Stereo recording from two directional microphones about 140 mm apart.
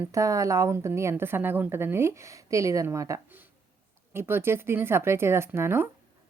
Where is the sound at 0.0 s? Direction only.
20° right (ahead or behind).